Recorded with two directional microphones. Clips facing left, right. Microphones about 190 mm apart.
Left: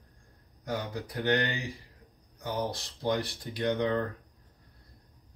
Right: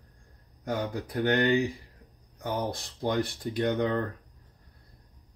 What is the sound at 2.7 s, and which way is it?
Speech, 55° right (ahead or behind).